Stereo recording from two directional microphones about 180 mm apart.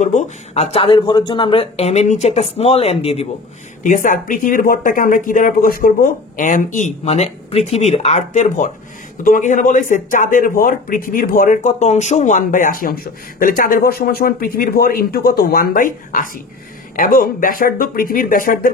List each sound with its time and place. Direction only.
0.0 s speech: 40° left (ahead or behind)
3.8 s speech: 45° left (ahead or behind)